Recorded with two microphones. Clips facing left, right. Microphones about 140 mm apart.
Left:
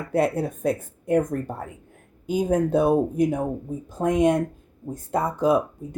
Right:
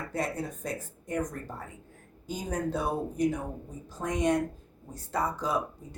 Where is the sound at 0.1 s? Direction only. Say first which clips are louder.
Left 12 dB; 60° left (ahead or behind).